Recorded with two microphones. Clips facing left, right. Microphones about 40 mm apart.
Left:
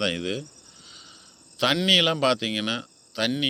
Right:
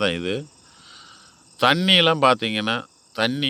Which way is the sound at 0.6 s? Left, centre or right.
Right.